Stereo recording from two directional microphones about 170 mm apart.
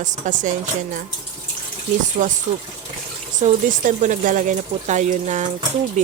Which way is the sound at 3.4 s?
45° right (ahead or behind).